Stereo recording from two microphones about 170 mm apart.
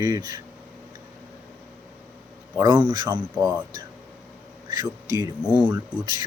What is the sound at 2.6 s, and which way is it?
A man's voice, 25° right (ahead or behind).